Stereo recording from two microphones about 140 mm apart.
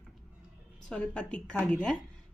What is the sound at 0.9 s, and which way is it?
Speech, 10° left (ahead or behind).